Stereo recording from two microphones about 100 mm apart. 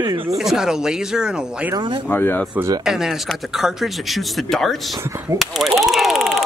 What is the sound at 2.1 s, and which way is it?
Speech, 20° left (ahead or behind).